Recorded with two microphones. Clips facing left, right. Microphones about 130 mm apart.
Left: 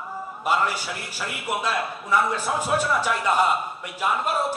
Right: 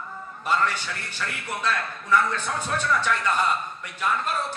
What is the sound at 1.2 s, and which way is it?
A man's voice, 10° left (ahead or behind).